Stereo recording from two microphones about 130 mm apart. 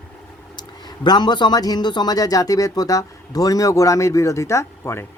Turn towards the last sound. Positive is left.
turn(degrees=20)  # may be behind; listen again after turning